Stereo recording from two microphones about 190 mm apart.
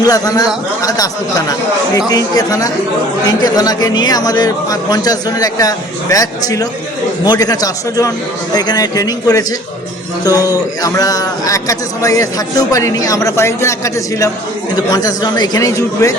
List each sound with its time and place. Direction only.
0.0 s a man's voice: 20° left (ahead or behind)